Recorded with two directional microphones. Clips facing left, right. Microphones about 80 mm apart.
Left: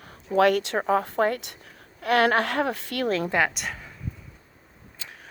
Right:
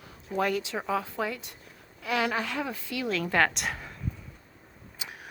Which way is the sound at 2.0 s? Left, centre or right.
Left.